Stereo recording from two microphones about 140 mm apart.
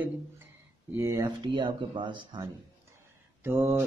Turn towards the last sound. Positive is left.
turn(degrees=-15)  # may be behind; listen again after turning